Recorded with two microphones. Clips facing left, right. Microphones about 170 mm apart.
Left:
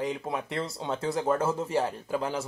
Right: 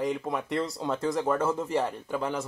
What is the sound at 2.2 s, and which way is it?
Speech, 5° left (ahead or behind).